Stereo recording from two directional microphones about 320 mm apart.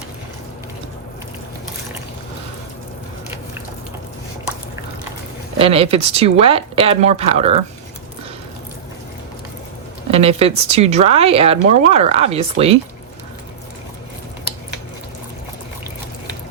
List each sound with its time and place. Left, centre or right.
5.5 s speech: centre
10.1 s speech: centre